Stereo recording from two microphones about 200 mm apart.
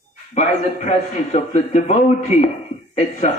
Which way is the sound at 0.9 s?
35° left (ahead or behind).